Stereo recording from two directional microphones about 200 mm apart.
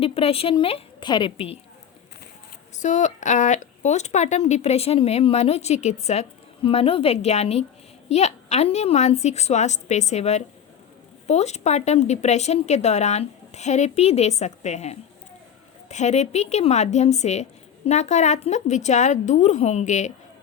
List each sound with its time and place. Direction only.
0.0 s a woman's voice: 30° left (ahead or behind)
2.7 s speech: 35° left (ahead or behind)